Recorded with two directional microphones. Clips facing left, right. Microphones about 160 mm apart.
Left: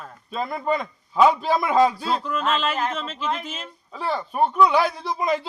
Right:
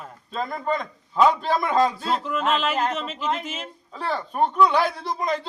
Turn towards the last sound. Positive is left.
turn(degrees=5)  # may be behind; listen again after turning